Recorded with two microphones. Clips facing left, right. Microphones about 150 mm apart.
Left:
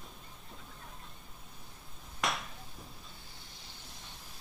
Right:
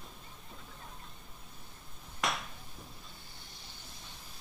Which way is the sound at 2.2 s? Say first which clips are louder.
Even; centre (ahead or behind).